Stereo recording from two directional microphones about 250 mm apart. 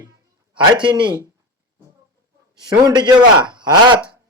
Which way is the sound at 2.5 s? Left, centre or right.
Centre.